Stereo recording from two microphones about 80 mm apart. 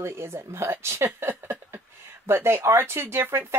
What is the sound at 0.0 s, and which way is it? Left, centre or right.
Speech, right.